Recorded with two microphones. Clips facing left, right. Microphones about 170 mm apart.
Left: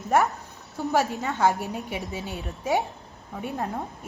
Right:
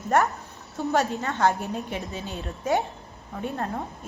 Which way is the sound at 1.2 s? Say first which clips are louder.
Even; 15° left (ahead or behind).